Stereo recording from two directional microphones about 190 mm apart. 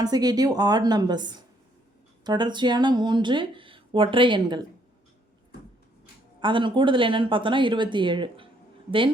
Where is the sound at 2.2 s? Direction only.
25° right (ahead or behind).